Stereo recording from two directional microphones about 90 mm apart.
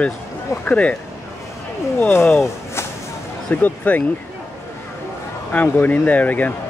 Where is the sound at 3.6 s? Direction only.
20° left (ahead or behind).